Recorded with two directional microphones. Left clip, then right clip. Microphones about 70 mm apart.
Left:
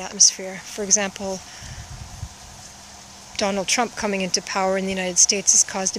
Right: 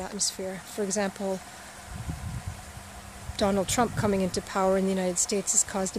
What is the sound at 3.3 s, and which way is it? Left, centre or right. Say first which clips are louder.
Speech: left 3 dB; right.